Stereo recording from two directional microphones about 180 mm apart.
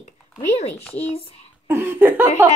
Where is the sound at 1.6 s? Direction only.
15° right (ahead or behind).